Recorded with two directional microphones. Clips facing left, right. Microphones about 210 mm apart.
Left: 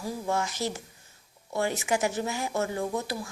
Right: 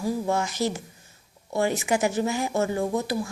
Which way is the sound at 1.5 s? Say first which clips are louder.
Right 4 dB; 20° right (ahead or behind).